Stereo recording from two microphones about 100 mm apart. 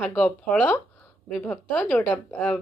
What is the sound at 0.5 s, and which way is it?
Speech, 15° left (ahead or behind).